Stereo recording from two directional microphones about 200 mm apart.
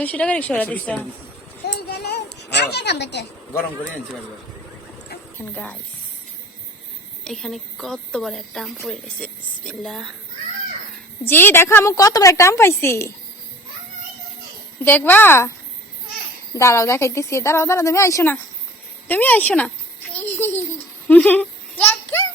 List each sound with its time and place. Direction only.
0.0 s a woman's voice: 5° left (ahead or behind)
1.6 s a sound: 55° left (ahead or behind)
5.4 s a woman's voice: 5° left (ahead or behind)
7.3 s speech: centre (ahead or behind)
11.2 s a woman's voice: 10° left (ahead or behind)
14.8 s a woman's voice: 10° left (ahead or behind)
16.6 s a woman's voice: 15° left (ahead or behind)
20.1 s babbling: 10° left (ahead or behind)
21.1 s a sound: 10° left (ahead or behind)